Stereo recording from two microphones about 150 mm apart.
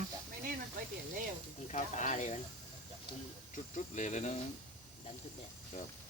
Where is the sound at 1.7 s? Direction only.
55° left (ahead or behind).